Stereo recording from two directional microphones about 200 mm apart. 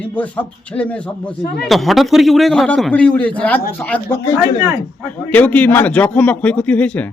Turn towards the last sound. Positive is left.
turn(degrees=5)  # may be behind; listen again after turning